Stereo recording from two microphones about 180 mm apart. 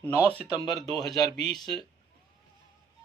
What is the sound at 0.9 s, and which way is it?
Speech, centre (ahead or behind).